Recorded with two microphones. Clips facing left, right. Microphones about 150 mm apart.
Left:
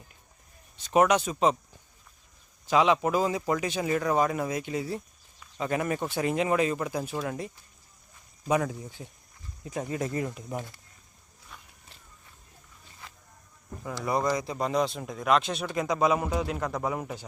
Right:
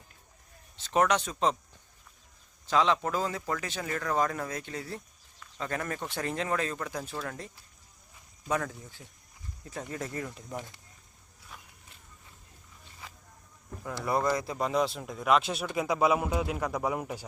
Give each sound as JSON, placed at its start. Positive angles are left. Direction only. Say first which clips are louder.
{"t": 0.8, "sound": "a man's voice", "louder": "left 4 dB", "side_deg": 10}
{"t": 2.6, "sound": "a man's voice", "louder": "left 3 dB", "side_deg": 10}
{"t": 11.5, "sound": "walk", "louder": "even", "side_deg": -5}
{"t": 13.8, "sound": "speech", "louder": "left 1 dB", "side_deg": 0}
{"t": 14.2, "sound": "a man's voice", "louder": "left 1 dB", "side_deg": 15}
{"t": 14.4, "sound": "a man's voice", "louder": "left 1 dB", "side_deg": 0}